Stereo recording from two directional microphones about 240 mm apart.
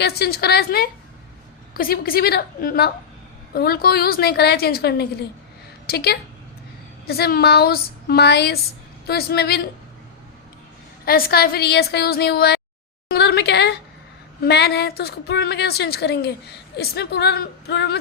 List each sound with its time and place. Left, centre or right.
0.0 s a woman's voice: left
11.0 s a woman's voice: left
13.1 s a sound: left
14.4 s a woman's voice: left